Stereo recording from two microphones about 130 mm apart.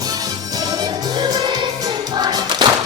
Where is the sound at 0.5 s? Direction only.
30° right (ahead or behind).